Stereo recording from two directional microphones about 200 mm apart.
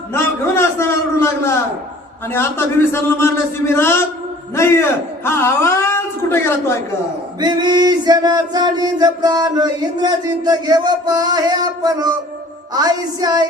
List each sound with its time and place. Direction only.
0.1 s a sound: 10° left (ahead or behind)
2.2 s a man's voice: 10° left (ahead or behind)
7.3 s male singing: 20° right (ahead or behind)